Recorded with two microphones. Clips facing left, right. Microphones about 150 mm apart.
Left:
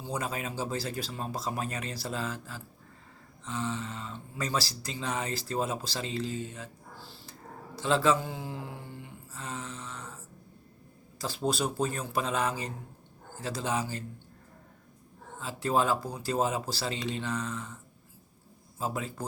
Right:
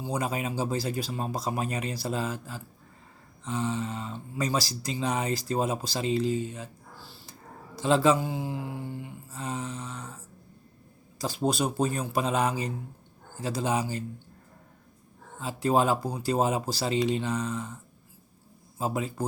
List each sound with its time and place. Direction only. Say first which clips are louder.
0.0 s speech: right 4 dB; 15° right (ahead or behind)
9.3 s a sound: right 5 dB; 15° right (ahead or behind)
11.2 s speech: right 3 dB; 15° right (ahead or behind)
15.4 s speech: right 3 dB; 15° right (ahead or behind)
18.8 s speech: right 4 dB; 15° right (ahead or behind)